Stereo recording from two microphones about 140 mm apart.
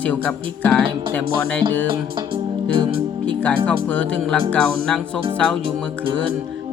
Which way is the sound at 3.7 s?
5° left (ahead or behind).